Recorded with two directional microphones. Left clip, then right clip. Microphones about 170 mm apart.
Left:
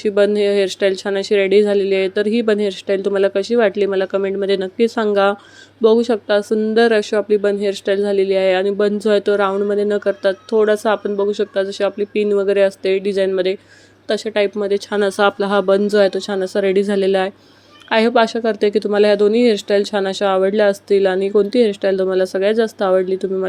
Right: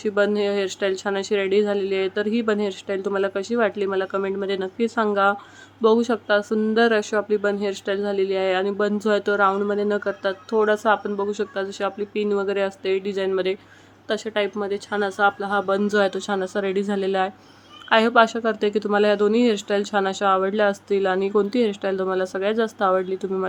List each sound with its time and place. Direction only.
0.0 s speech: 25° left (ahead or behind)
5.8 s speech: 20° left (ahead or behind); by 15.8 s 35° left (ahead or behind)
15.8 s speech: 20° left (ahead or behind)